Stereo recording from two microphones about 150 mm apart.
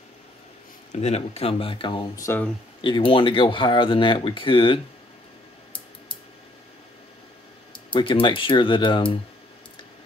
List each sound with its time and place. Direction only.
0.9 s speech: 45° left (ahead or behind)
2.2 s speech: 15° left (ahead or behind)
2.8 s speech: 35° left (ahead or behind)
7.9 s speech: 35° left (ahead or behind)